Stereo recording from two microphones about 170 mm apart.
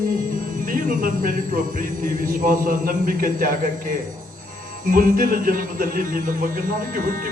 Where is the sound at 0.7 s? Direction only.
55° right (ahead or behind).